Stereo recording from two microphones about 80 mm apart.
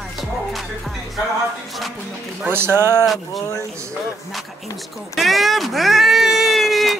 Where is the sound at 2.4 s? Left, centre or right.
Right.